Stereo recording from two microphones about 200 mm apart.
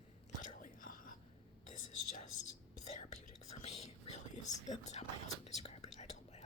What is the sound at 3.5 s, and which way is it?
Whispering, 30° left (ahead or behind).